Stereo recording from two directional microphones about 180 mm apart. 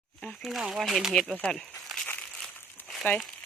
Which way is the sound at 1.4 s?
5° left (ahead or behind).